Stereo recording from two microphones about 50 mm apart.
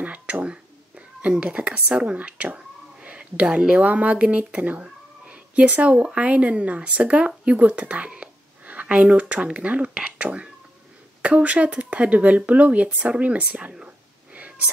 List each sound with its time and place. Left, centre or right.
0.0 s whispering: right
3.8 s speech: right
13.2 s a sound: right